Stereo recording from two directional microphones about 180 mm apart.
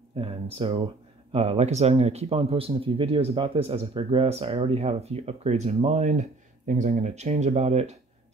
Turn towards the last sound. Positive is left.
turn(degrees=-35)  # may be behind; listen again after turning